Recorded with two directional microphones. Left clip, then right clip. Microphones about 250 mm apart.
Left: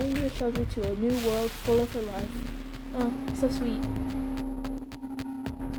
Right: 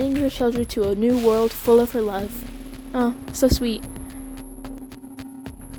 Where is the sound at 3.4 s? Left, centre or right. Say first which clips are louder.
Right 10 dB; right.